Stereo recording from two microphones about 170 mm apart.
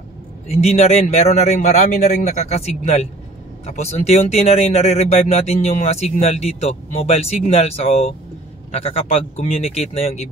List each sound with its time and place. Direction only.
0.5 s speech: 40° left (ahead or behind)